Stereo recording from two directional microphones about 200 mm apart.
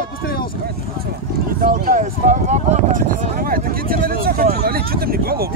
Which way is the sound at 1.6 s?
40° right (ahead or behind).